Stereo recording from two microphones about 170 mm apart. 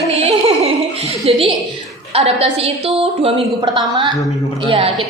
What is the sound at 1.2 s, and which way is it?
A woman's voice, 35° right (ahead or behind).